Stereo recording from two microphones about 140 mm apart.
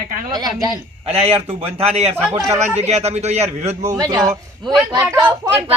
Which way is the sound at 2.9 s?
50° right (ahead or behind).